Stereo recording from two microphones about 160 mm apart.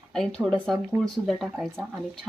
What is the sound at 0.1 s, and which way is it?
Speech, 5° left (ahead or behind).